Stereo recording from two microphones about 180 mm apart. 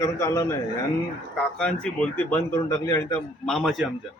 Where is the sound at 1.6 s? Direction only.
5° left (ahead or behind).